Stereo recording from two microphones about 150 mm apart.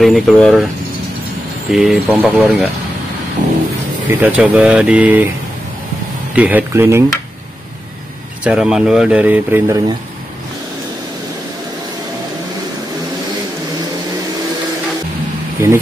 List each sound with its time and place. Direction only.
0.0 s speech: centre (ahead or behind)
1.7 s speech: 5° right (ahead or behind)
3.4 s vehicle: 60° right (ahead or behind)
4.1 s speech: 10° right (ahead or behind)
6.3 s speech: 10° right (ahead or behind)
8.5 s speech: 5° right (ahead or behind); by 9.9 s 20° right (ahead or behind)